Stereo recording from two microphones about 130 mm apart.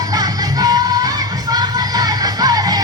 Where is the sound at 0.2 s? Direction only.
30° right (ahead or behind).